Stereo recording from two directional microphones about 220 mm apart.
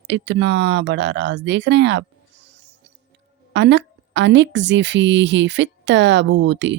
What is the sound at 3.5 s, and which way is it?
Speech, 55° right (ahead or behind).